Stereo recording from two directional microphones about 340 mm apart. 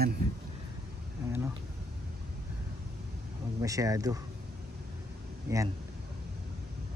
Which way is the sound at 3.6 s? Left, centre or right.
Centre.